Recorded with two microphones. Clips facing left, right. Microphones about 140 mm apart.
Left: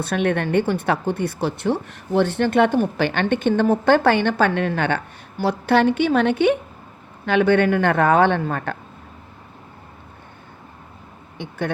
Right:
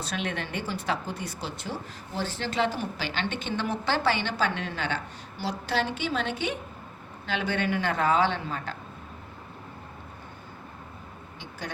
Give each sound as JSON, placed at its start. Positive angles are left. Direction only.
{"t": 0.0, "sound": "speech", "side_deg": 55}